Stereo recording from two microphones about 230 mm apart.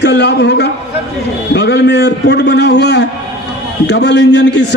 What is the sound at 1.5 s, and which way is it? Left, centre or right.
A man's voice, left.